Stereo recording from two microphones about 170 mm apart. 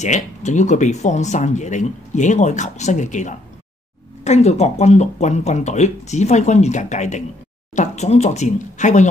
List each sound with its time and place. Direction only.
0.0 s speech: 45° left (ahead or behind)